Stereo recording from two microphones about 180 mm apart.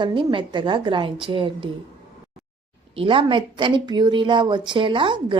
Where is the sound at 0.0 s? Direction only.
25° right (ahead or behind).